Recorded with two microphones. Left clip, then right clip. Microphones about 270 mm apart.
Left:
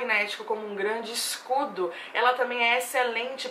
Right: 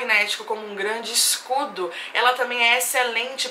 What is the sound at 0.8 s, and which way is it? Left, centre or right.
Speech, centre.